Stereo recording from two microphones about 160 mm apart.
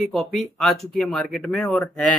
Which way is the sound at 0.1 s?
Centre (ahead or behind).